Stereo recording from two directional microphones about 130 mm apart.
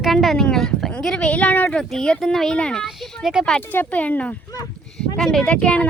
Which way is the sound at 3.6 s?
15° left (ahead or behind).